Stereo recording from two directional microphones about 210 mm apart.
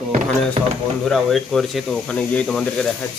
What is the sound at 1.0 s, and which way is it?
Speech, centre (ahead or behind).